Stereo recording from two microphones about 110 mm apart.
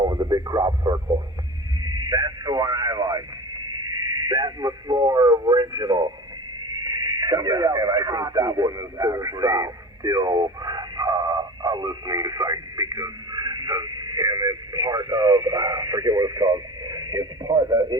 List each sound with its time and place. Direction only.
0.0 s speech: 35° right (ahead or behind)
4.3 s a man's voice: 35° right (ahead or behind)